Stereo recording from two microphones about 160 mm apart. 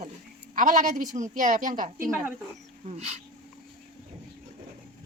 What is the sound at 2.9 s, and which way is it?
Speech, 40° right (ahead or behind).